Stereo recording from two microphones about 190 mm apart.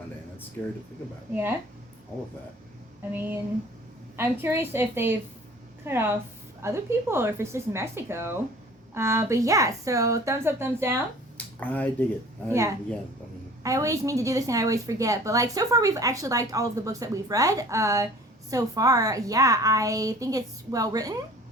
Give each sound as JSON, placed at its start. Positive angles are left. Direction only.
{"t": 1.3, "sound": "a woman's voice", "side_deg": -10}
{"t": 3.1, "sound": "a woman's voice", "side_deg": -10}
{"t": 11.3, "sound": "speech", "side_deg": 5}
{"t": 12.5, "sound": "a woman's voice", "side_deg": -15}